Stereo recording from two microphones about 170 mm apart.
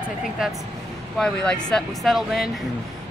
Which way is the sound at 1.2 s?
5° left (ahead or behind).